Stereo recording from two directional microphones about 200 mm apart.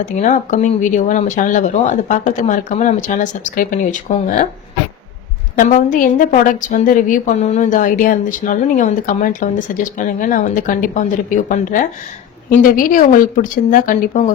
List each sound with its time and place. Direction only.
0.0 s a woman's voice: 40° left (ahead or behind)
5.5 s a woman's voice: 40° left (ahead or behind)